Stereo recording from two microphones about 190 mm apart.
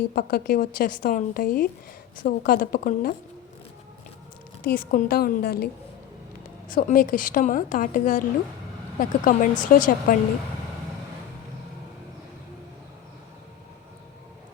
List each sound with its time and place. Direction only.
0.1 s a woman's voice: 55° left (ahead or behind)
4.6 s a woman's voice: 45° left (ahead or behind)
6.7 s a woman's voice: 45° left (ahead or behind)